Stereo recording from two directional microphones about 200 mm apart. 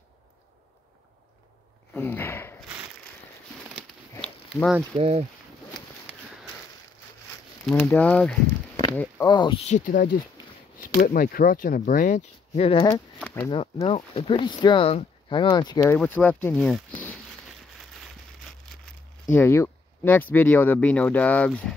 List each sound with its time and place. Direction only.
2.0 s a sound: 10° left (ahead or behind)
4.2 s a sound: 5° left (ahead or behind)
4.9 s speech: 30° right (ahead or behind)
7.6 s speech: 5° left (ahead or behind)
9.3 s speech: 20° left (ahead or behind)
9.7 s speech: 40° left (ahead or behind)
13.2 s a sound: 10° left (ahead or behind)
13.5 s speech: 25° left (ahead or behind)
15.8 s speech: 10° left (ahead or behind)
19.3 s speech: 10° left (ahead or behind)